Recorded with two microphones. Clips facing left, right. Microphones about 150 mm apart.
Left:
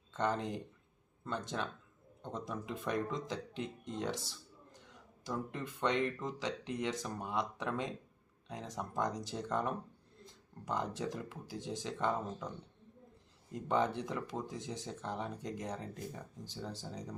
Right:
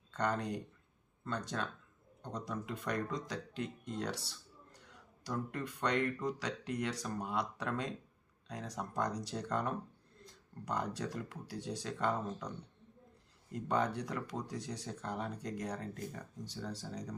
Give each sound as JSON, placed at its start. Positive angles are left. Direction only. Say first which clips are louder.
{"t": 0.1, "sound": "speech", "louder": "even", "side_deg": 25}
{"t": 13.5, "sound": "speech", "louder": "left 1 dB", "side_deg": 20}